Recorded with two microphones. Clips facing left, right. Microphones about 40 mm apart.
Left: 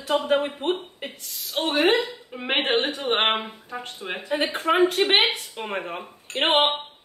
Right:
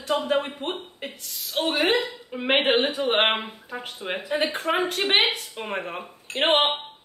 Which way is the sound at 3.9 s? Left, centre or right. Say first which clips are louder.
Right 4 dB; centre.